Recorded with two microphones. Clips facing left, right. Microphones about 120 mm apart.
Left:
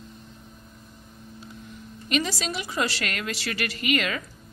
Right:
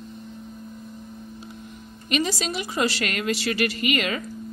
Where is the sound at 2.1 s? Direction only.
15° right (ahead or behind).